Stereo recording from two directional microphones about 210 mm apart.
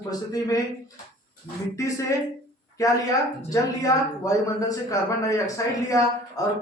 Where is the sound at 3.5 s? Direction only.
15° left (ahead or behind).